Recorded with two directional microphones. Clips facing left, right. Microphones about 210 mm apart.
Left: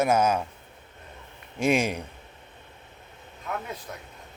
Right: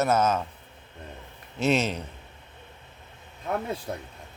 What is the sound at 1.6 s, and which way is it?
Speech, 10° left (ahead or behind).